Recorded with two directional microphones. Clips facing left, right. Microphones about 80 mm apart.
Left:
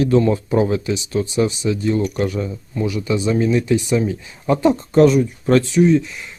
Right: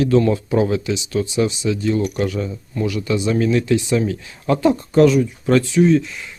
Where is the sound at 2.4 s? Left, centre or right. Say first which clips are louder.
Even; left.